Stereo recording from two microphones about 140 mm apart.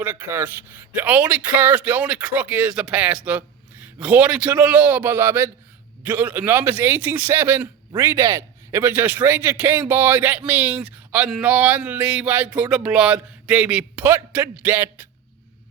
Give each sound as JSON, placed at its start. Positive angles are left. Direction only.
{"t": 0.0, "sound": "speech", "side_deg": -15}